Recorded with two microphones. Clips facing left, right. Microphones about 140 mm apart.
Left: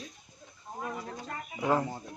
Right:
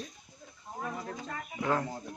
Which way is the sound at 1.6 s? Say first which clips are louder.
Left 3 dB; 20° left (ahead or behind).